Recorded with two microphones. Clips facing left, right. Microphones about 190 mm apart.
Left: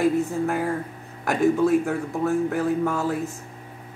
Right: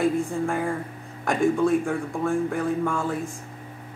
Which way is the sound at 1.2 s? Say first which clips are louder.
Left 1 dB; 5° left (ahead or behind).